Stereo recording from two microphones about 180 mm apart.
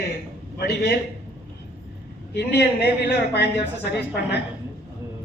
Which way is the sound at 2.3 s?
65° left (ahead or behind).